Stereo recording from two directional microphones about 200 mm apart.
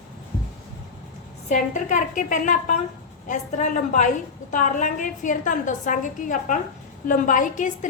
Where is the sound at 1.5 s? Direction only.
40° left (ahead or behind).